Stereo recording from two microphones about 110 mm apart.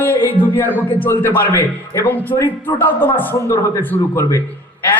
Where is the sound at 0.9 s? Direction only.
15° left (ahead or behind).